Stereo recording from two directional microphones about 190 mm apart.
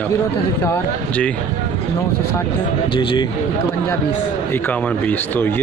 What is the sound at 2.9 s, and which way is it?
Speech, 25° left (ahead or behind).